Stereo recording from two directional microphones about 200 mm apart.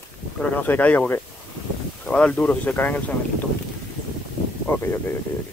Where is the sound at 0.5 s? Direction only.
10° left (ahead or behind).